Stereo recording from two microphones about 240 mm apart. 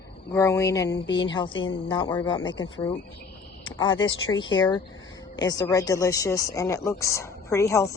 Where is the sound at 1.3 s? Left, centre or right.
Centre.